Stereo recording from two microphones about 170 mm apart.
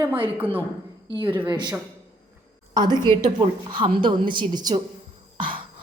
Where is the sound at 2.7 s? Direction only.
25° right (ahead or behind).